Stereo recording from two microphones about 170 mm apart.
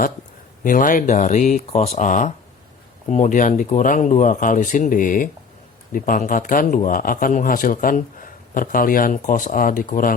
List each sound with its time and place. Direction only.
0.6 s speech: 55° left (ahead or behind)